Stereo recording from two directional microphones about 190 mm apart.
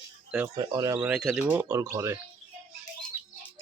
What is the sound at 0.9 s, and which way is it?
Speech, 5° right (ahead or behind).